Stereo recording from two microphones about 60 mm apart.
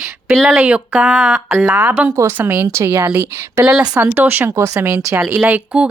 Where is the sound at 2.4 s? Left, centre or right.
Right.